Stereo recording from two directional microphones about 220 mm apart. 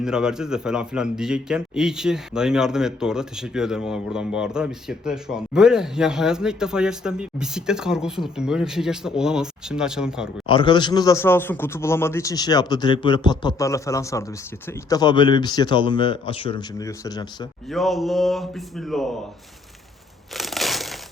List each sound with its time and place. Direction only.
0.0 s a man's voice: 5° right (ahead or behind)
10.4 s a man's voice: 20° left (ahead or behind)
17.7 s a man's voice: centre (ahead or behind)
20.3 s crumpling: centre (ahead or behind)